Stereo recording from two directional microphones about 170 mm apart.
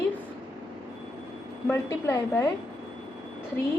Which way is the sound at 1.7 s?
15° left (ahead or behind).